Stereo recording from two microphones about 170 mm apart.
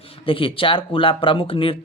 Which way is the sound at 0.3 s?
30° left (ahead or behind).